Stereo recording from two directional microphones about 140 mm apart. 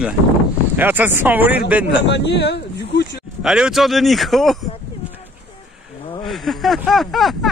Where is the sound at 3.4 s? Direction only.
5° right (ahead or behind).